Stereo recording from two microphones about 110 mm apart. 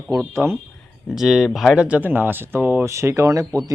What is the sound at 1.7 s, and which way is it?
Speech, 10° right (ahead or behind).